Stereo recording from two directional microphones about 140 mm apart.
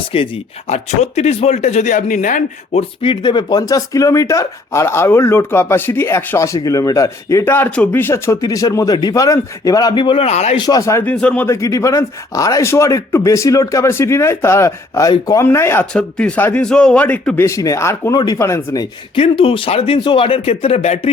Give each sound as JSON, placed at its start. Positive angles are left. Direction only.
{"t": 0.1, "sound": "speech", "side_deg": 40}
{"t": 0.7, "sound": "speech", "side_deg": 55}
{"t": 3.0, "sound": "speech", "side_deg": 35}
{"t": 10.6, "sound": "speech", "side_deg": 25}
{"t": 11.0, "sound": "a man's voice", "side_deg": 10}
{"t": 19.1, "sound": "speech", "side_deg": 40}